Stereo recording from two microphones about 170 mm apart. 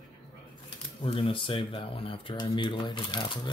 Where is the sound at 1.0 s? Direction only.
30° left (ahead or behind).